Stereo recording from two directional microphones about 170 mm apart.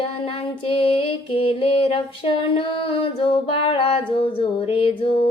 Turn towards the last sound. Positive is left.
turn(degrees=30)  # may be behind; listen again after turning